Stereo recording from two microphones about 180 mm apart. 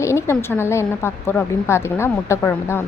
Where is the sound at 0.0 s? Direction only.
15° left (ahead or behind).